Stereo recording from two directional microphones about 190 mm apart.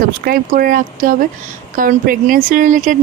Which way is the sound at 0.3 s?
50° right (ahead or behind).